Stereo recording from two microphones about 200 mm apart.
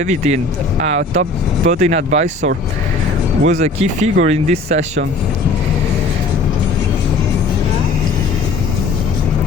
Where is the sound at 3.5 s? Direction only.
35° right (ahead or behind).